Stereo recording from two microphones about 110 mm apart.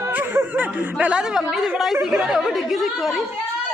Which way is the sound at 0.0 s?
15° right (ahead or behind).